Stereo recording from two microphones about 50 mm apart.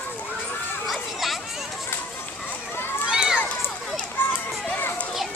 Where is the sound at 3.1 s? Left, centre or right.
Centre.